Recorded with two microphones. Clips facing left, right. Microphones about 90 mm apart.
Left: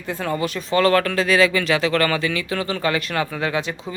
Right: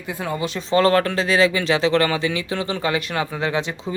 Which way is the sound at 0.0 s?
10° right (ahead or behind).